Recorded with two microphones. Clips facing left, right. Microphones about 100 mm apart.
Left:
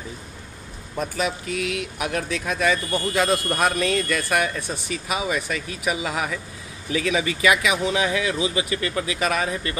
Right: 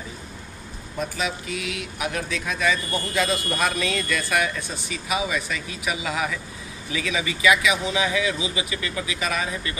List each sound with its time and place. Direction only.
1.1 s speech: 50° left (ahead or behind)